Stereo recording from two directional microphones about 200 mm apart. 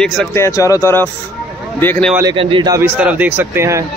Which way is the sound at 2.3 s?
25° right (ahead or behind).